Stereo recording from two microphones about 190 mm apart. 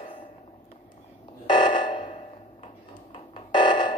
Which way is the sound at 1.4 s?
25° left (ahead or behind).